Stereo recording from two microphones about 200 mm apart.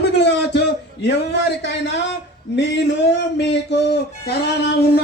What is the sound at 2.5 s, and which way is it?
Speech, 60° left (ahead or behind).